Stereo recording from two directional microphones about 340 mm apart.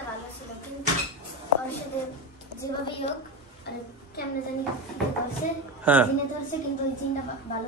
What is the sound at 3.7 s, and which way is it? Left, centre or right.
Speech, left.